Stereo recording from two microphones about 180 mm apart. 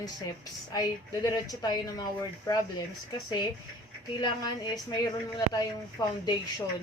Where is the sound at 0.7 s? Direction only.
20° left (ahead or behind).